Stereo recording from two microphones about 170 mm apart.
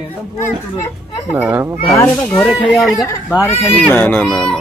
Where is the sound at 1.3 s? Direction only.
10° right (ahead or behind).